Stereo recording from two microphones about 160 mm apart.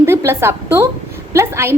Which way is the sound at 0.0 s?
15° right (ahead or behind).